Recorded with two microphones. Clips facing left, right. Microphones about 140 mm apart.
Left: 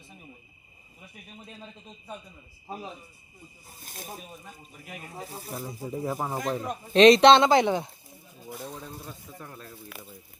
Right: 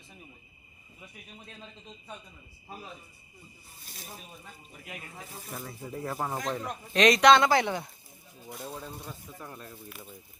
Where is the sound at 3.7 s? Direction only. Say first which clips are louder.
Left 6 dB; 50° left (ahead or behind).